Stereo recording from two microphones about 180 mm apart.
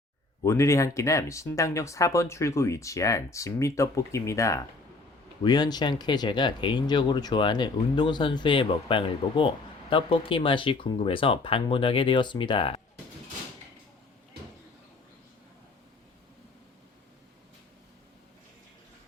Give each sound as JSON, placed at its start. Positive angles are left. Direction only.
{"t": 0.4, "sound": "speech", "side_deg": 15}